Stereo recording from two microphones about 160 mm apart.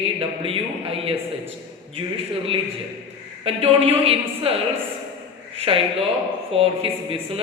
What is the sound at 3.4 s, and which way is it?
Speech, 35° right (ahead or behind).